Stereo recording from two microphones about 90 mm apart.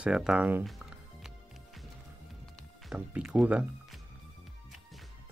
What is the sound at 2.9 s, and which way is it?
Speech, 10° right (ahead or behind).